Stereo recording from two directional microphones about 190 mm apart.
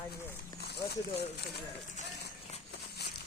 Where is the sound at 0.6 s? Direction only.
60° left (ahead or behind).